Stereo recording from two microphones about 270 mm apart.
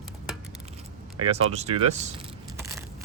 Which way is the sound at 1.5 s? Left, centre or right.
Right.